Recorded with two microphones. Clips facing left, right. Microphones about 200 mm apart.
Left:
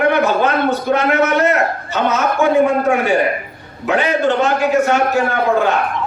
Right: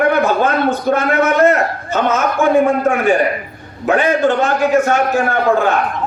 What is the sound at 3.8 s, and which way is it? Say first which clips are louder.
A man's voice: right 2 dB; 50° right (ahead or behind).